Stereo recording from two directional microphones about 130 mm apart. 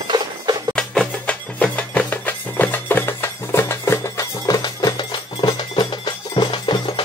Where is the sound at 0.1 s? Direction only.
35° right (ahead or behind).